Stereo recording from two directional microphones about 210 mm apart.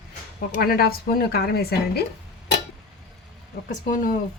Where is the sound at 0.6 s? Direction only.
45° left (ahead or behind).